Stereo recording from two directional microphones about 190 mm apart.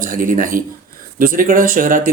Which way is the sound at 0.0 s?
45° right (ahead or behind).